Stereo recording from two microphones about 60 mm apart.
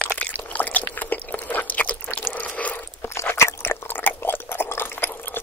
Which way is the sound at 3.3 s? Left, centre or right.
Left.